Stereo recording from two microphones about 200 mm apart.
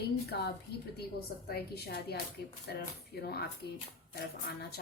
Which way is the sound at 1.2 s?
50° left (ahead or behind).